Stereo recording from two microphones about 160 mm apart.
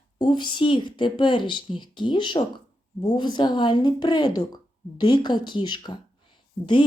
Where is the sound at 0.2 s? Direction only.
30° left (ahead or behind).